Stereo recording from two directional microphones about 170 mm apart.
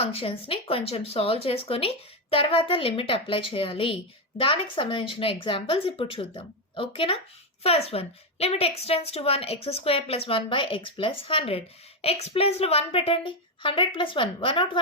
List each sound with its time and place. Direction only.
0.0 s a woman's voice: 35° left (ahead or behind)